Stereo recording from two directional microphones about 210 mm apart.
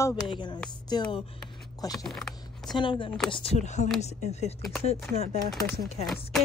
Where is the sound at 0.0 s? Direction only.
20° left (ahead or behind).